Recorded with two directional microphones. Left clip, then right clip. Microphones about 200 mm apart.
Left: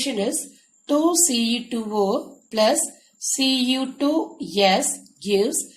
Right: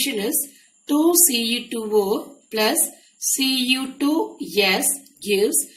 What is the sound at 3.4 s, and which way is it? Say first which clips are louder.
Speech: even; 40° left (ahead or behind).